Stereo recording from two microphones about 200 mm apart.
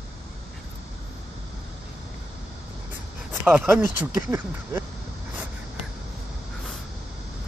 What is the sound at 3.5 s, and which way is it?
Speech, 5° right (ahead or behind).